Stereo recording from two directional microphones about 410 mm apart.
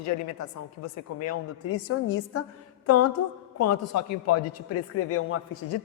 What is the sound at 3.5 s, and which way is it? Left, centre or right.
A man's voice, left.